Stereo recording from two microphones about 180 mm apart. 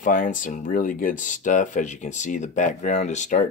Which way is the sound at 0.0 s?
45° left (ahead or behind).